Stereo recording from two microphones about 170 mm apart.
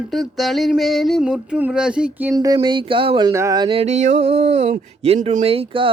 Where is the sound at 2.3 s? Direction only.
20° right (ahead or behind).